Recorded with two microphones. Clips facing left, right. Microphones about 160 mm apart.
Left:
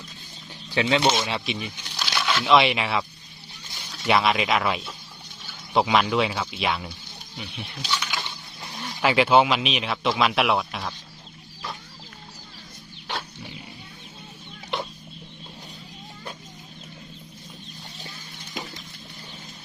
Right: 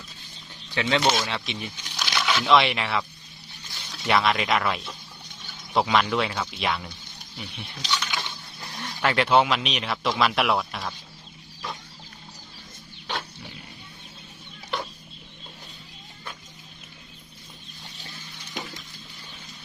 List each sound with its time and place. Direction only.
0.7 s speech: 10° left (ahead or behind)
0.9 s speech: 25° left (ahead or behind)
1.3 s a sound: 10° left (ahead or behind)
2.4 s speech: 5° left (ahead or behind)